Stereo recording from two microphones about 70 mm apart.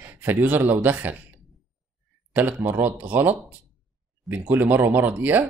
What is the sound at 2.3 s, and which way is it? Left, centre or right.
Speech, right.